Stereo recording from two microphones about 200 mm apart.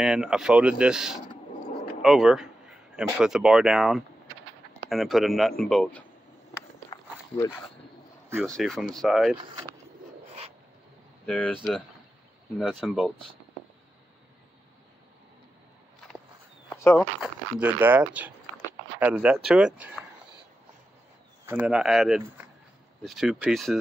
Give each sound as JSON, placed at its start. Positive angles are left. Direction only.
{"t": 0.0, "sound": "speech", "side_deg": -5}
{"t": 6.9, "sound": "walk", "side_deg": 20}
{"t": 8.4, "sound": "speech", "side_deg": 0}
{"t": 11.2, "sound": "speech", "side_deg": 5}
{"t": 16.6, "sound": "a sound", "side_deg": 15}
{"t": 17.2, "sound": "speech", "side_deg": -5}
{"t": 21.5, "sound": "speech", "side_deg": -5}